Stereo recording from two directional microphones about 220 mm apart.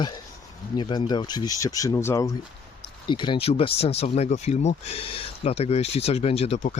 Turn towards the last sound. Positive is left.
turn(degrees=30)  # may be behind; listen again after turning